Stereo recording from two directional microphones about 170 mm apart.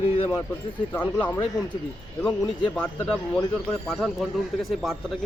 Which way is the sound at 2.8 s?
5° left (ahead or behind).